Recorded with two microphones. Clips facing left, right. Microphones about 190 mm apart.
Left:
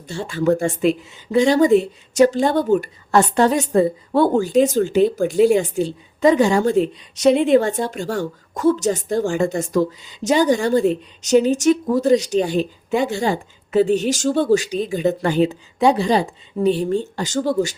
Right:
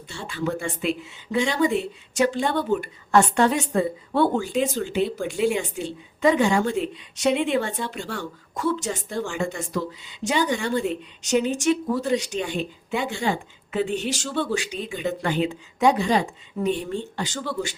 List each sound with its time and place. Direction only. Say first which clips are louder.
0.1 s speech: left 9 dB; 40° left (ahead or behind)